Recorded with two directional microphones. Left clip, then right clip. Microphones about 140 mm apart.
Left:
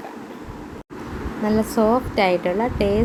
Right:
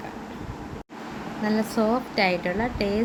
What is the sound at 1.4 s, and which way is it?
Speech, 15° left (ahead or behind).